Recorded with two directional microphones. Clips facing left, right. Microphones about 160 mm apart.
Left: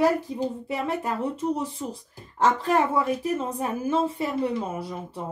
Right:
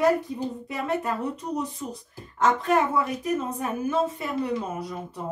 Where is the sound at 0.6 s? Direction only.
30° left (ahead or behind).